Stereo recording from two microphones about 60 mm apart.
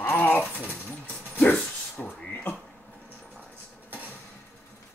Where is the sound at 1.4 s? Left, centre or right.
Left.